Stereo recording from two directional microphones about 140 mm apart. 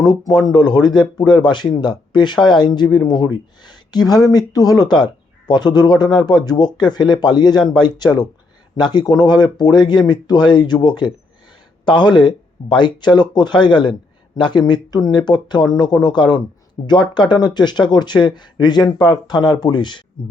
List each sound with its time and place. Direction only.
0.0 s speech: 30° left (ahead or behind)